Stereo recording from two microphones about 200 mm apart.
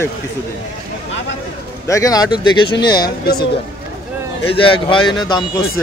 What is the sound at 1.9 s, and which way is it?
Speech, 15° left (ahead or behind).